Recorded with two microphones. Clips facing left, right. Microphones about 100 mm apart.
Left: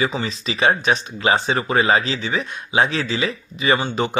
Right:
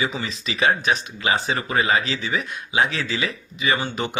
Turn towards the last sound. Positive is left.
turn(degrees=35)  # may be behind; listen again after turning